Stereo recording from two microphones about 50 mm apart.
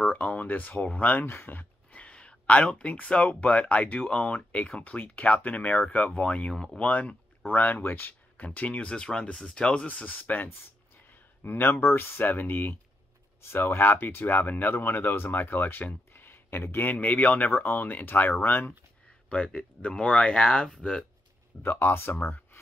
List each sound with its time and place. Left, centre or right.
0.0 s speech: left
1.2 s speech: left; by 9.8 s centre
9.8 s speech: left
16.8 s speech: left
19.2 s speech: left
21.6 s speech: left